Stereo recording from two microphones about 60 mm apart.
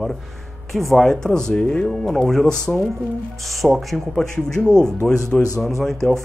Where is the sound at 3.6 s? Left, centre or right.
Centre.